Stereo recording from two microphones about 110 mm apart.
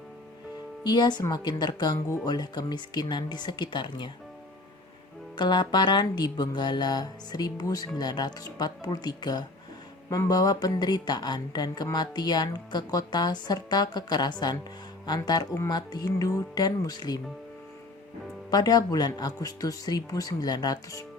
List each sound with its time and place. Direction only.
0.9 s speech: 40° left (ahead or behind)
5.4 s speech: 40° left (ahead or behind)
18.5 s speech: 35° left (ahead or behind)